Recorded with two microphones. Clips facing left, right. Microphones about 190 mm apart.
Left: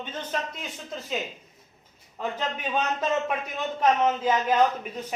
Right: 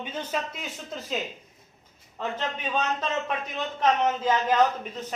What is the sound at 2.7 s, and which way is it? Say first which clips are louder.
Speech: left 3 dB; 10° left (ahead or behind).